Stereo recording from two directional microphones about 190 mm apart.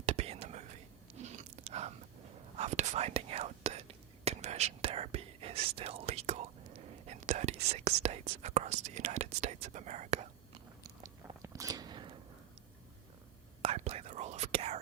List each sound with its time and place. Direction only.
0.0 s whispering: 35° right (ahead or behind)
1.2 s chewing: 35° right (ahead or behind)
2.6 s whispering: 35° right (ahead or behind)
7.9 s speech: 35° right (ahead or behind)
10.8 s a sound: 20° right (ahead or behind)
13.6 s whispering: 35° right (ahead or behind)